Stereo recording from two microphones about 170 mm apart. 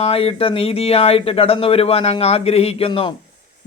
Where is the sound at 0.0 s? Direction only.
35° left (ahead or behind).